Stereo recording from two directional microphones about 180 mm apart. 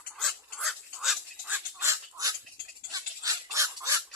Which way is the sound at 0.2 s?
Centre (ahead or behind).